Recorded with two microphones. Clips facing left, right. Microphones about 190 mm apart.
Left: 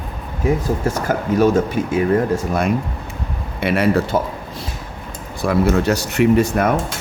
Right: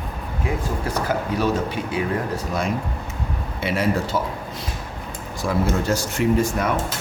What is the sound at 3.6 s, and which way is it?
Speech, 60° left (ahead or behind).